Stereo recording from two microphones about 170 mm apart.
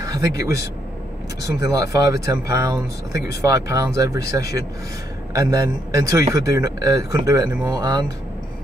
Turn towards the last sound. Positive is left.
turn(degrees=-20)  # may be behind; listen again after turning